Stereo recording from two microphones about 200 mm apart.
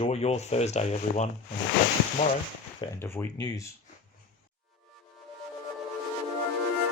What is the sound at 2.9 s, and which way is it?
Speech, 10° left (ahead or behind).